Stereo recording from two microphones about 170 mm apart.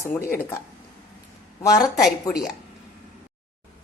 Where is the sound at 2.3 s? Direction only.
20° left (ahead or behind).